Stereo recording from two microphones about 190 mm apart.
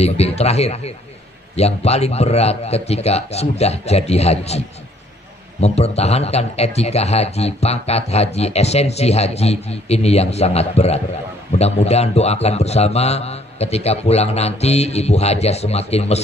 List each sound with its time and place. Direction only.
0.0 s a man's voice: 35° left (ahead or behind)